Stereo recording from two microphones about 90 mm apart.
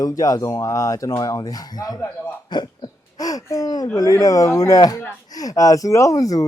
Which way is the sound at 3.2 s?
45° left (ahead or behind).